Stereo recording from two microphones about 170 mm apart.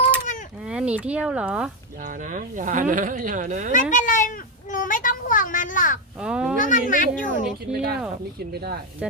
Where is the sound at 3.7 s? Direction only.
50° left (ahead or behind).